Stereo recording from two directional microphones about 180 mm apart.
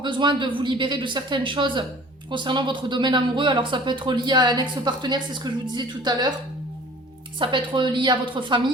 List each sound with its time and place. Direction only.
0.0 s speech: 25° right (ahead or behind)
7.3 s speech: 30° right (ahead or behind)